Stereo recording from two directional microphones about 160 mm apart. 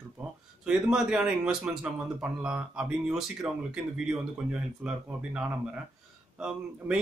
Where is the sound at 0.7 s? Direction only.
5° right (ahead or behind).